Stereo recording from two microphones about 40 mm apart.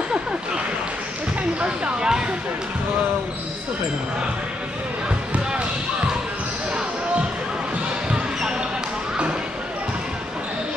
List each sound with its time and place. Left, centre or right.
1.6 s speech: centre
8.4 s basketball bounce: centre